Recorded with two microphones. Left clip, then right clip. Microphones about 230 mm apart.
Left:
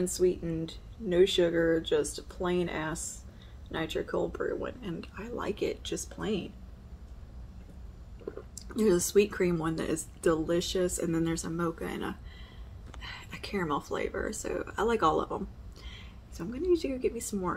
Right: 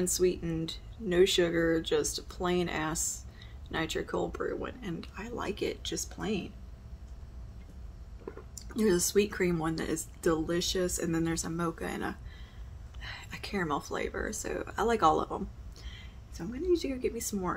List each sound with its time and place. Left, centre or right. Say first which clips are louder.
0.0 s speech: left 1 dB; right; by 6.4 s centre
8.6 s speech: left 1 dB; centre